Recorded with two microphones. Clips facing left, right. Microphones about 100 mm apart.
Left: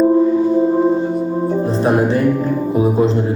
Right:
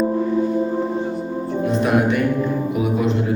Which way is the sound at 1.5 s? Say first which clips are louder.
Left 1 dB; 35° left (ahead or behind).